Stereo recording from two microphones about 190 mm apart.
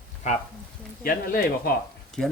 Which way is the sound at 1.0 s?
50° left (ahead or behind).